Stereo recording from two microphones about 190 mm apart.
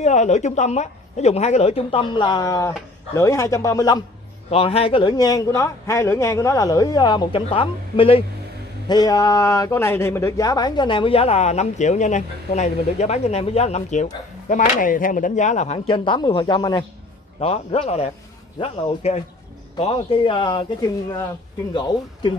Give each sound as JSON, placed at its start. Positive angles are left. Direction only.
{"t": 0.0, "sound": "a man's voice", "side_deg": 40}
{"t": 4.5, "sound": "a man's voice", "side_deg": 30}